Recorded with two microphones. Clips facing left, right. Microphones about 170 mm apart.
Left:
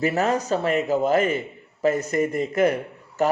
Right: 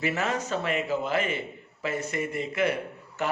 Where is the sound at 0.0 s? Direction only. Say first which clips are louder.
Left 6 dB; 40° left (ahead or behind).